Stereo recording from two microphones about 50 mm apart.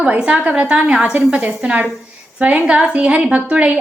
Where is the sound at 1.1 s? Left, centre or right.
Right.